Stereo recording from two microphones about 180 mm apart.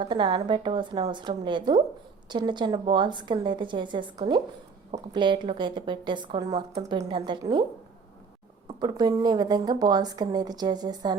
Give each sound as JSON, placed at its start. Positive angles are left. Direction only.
{"t": 0.0, "sound": "speech", "side_deg": -25}
{"t": 8.6, "sound": "speech", "side_deg": -25}